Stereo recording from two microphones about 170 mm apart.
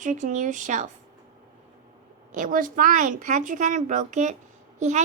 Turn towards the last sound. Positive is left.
turn(degrees=-45)  # may be behind; listen again after turning